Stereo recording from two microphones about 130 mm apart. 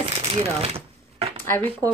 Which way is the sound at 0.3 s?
50° right (ahead or behind).